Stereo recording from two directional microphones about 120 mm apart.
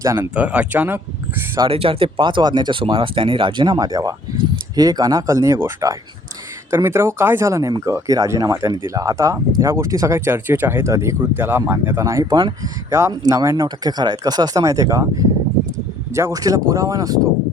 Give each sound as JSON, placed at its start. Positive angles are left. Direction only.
{"t": 0.0, "sound": "speech", "side_deg": -25}
{"t": 0.3, "sound": "speech", "side_deg": -10}
{"t": 1.5, "sound": "speech", "side_deg": -45}
{"t": 12.3, "sound": "speech", "side_deg": -40}
{"t": 12.9, "sound": "speech", "side_deg": -25}